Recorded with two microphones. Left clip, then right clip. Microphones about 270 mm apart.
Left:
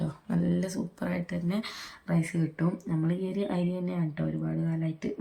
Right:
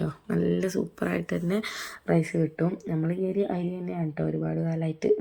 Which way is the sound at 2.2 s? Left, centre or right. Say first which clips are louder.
Right 5 dB; left.